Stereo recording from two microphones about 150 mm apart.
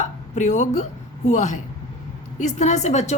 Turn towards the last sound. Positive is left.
turn(degrees=50)  # may be behind; listen again after turning